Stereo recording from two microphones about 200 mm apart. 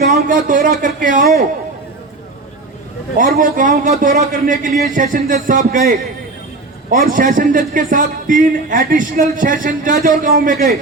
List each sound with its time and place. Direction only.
0.0 s a man's voice: 45° right (ahead or behind)
3.2 s a man's voice: 45° right (ahead or behind)